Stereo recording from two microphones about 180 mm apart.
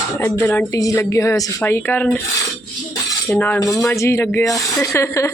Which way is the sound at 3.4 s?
10° left (ahead or behind).